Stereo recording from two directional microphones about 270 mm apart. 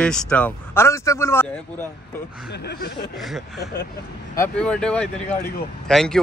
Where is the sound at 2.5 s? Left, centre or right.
Left.